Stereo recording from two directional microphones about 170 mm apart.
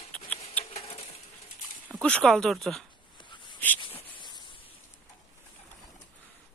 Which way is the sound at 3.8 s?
30° left (ahead or behind).